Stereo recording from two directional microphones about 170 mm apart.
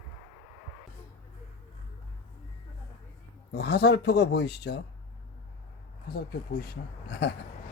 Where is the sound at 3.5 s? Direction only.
80° left.